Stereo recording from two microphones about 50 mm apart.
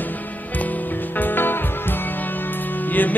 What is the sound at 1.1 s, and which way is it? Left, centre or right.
Music, left.